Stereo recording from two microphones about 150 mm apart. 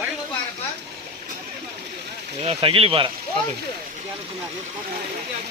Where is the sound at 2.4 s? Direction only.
40° right (ahead or behind).